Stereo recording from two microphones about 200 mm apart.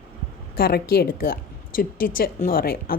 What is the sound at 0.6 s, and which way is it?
A woman's voice, 50° left (ahead or behind).